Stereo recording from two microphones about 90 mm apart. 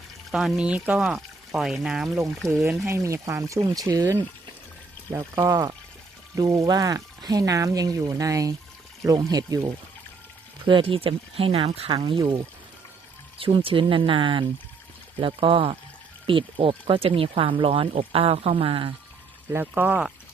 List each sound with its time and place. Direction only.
0.3 s speech: centre (ahead or behind)
2.4 s speech: 5° left (ahead or behind)
2.8 s speech: 30° right (ahead or behind)
5.1 s speech: 35° right (ahead or behind)
10.7 s speech: 80° right
13.4 s speech: 90° right
19.5 s speech: 20° right (ahead or behind)